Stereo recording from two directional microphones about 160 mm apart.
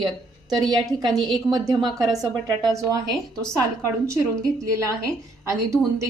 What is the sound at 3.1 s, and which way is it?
Speech, 5° left (ahead or behind).